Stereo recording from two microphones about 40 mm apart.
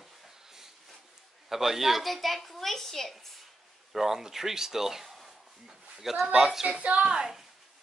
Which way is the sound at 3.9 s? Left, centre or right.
Centre.